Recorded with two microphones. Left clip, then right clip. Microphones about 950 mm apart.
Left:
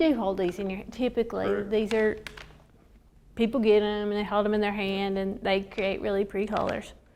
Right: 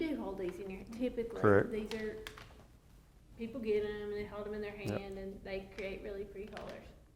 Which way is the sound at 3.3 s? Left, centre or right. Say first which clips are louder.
Left 14 dB; left.